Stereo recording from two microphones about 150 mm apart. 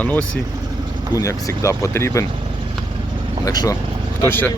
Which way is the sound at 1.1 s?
20° left (ahead or behind).